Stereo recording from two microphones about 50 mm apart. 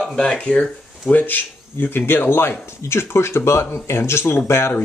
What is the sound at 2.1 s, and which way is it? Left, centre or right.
Speech, left.